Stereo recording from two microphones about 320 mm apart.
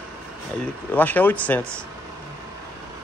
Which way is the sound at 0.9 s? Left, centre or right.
Centre.